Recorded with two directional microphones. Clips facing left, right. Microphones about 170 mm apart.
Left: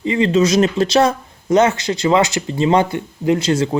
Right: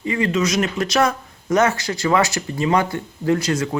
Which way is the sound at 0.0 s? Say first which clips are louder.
Left 5 dB; 25° left (ahead or behind).